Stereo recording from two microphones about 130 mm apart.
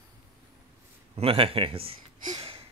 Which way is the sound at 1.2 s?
45° right (ahead or behind).